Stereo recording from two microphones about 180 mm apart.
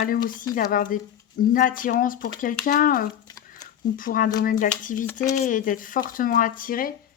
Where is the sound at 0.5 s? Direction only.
50° left (ahead or behind).